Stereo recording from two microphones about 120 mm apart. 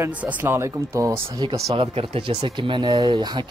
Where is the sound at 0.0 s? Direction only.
10° right (ahead or behind).